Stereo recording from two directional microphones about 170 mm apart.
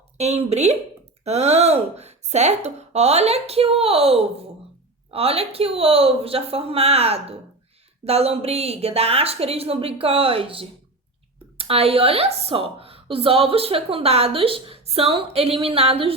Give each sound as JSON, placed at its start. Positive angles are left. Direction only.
{"t": 0.2, "sound": "a woman's voice", "side_deg": -40}